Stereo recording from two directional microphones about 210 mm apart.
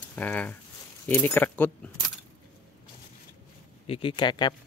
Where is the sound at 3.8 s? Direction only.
25° left (ahead or behind).